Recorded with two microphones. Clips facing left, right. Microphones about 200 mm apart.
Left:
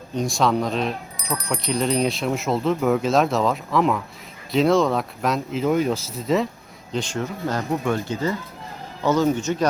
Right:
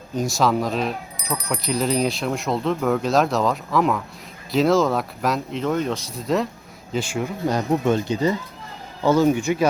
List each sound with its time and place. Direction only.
0.1 s speech: centre (ahead or behind)